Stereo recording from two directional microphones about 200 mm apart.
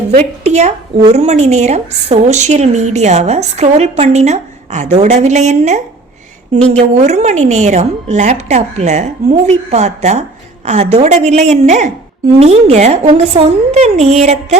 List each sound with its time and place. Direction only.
0.1 s a woman's voice: 35° right (ahead or behind)